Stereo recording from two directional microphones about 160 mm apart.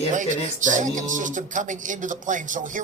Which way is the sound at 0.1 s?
50° right (ahead or behind).